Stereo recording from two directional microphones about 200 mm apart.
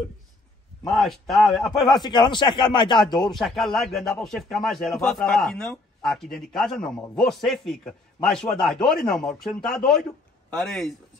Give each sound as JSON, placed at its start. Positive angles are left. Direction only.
{"t": 0.8, "sound": "a man's voice", "side_deg": 0}
{"t": 2.0, "sound": "speech", "side_deg": 20}
{"t": 3.3, "sound": "a man's voice", "side_deg": 0}